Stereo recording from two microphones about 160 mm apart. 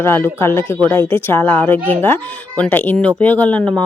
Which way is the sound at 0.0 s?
15° left (ahead or behind).